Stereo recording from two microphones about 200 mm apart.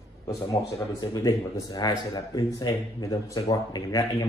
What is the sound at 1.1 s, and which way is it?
A man's voice, 20° left (ahead or behind).